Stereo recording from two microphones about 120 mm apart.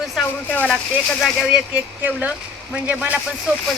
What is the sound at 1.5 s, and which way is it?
Speech, 10° right (ahead or behind).